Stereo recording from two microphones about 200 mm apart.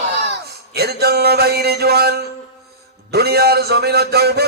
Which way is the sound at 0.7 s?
55° right (ahead or behind).